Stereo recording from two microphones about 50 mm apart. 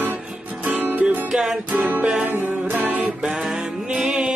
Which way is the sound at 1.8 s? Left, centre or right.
Right.